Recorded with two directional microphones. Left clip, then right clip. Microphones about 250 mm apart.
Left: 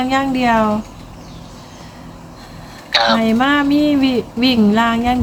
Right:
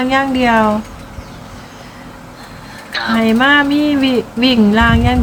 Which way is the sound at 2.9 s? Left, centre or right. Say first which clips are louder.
Left 5 dB; left.